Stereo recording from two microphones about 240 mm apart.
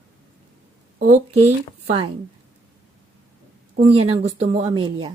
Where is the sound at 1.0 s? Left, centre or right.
Right.